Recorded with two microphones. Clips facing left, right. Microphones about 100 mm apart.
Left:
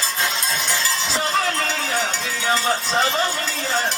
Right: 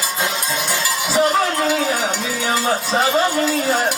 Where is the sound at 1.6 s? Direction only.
10° right (ahead or behind).